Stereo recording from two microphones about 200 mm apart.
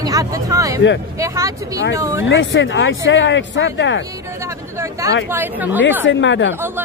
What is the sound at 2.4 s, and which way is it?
Speech, 65° left (ahead or behind).